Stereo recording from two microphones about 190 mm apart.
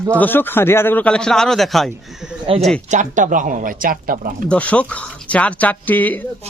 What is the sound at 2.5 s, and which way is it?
Speech, 30° right (ahead or behind).